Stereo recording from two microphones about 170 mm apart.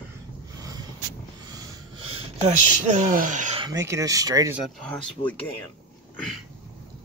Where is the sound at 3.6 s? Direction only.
20° right (ahead or behind).